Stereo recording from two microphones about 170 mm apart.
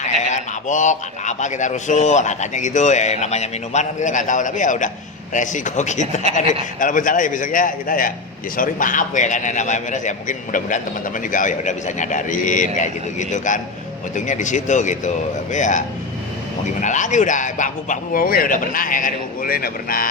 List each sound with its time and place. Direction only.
0.0 s a man's voice: 45° left (ahead or behind)
16.8 s a man's voice: 45° left (ahead or behind)